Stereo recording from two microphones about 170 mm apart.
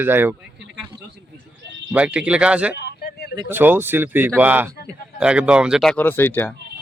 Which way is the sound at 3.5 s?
10° right (ahead or behind).